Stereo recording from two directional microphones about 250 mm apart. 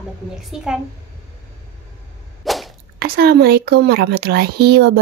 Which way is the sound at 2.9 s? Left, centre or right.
Right.